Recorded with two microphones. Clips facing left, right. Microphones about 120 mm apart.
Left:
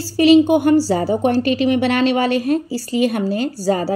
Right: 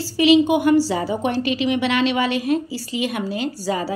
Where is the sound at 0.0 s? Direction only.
40° left (ahead or behind).